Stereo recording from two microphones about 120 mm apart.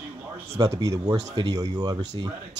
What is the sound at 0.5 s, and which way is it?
Speech, 30° right (ahead or behind).